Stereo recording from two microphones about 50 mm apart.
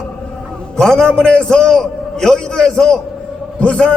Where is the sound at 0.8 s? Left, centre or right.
Centre.